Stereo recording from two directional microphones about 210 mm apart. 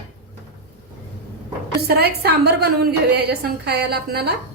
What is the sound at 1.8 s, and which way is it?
A woman's voice, 50° right (ahead or behind).